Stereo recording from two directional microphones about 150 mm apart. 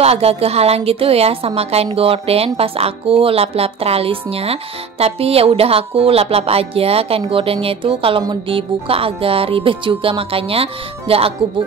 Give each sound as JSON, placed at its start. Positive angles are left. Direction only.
{"t": 0.0, "sound": "a woman's voice", "side_deg": -45}